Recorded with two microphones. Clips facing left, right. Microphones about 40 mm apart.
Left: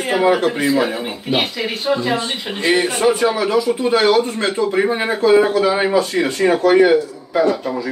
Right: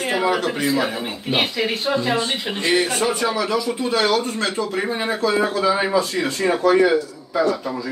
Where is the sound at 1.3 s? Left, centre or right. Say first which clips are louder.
Left 1 dB; centre; by 5.8 s left.